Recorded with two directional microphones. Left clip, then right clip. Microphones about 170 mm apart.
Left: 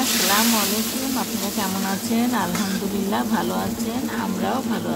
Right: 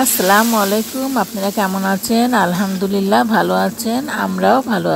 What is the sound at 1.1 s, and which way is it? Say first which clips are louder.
Speech: right 8 dB; 40° right (ahead or behind).